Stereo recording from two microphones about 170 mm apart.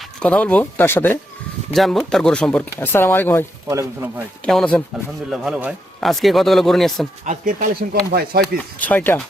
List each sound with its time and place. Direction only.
0.2 s speech: 5° left (ahead or behind)
1.7 s speech: centre (ahead or behind)
3.7 s speech: 15° right (ahead or behind)
4.4 s speech: 5° left (ahead or behind)
5.3 s speech: 5° right (ahead or behind)
7.3 s speech: 50° right (ahead or behind)
8.1 s speech: 60° right (ahead or behind)
8.8 s speech: 10° left (ahead or behind)